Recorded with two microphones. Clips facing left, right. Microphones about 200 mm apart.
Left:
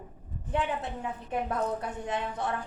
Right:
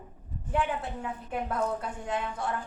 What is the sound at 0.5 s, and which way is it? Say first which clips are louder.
A woman's voice: right 1 dB; 20° left (ahead or behind).